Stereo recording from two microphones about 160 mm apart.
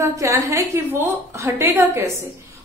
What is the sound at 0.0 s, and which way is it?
Speech, 20° right (ahead or behind).